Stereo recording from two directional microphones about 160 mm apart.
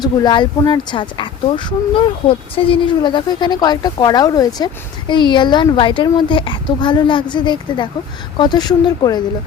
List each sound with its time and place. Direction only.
0.0 s speech: 25° left (ahead or behind)